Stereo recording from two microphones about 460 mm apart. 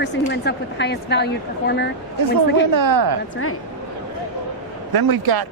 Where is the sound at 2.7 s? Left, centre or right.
Right.